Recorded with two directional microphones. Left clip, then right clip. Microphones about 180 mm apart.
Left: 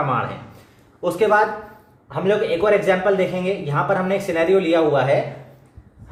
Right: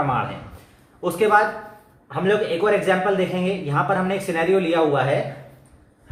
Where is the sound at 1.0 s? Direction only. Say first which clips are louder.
Left 1 dB; 35° right (ahead or behind).